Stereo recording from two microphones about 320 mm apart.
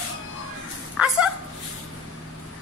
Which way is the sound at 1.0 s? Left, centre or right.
Centre.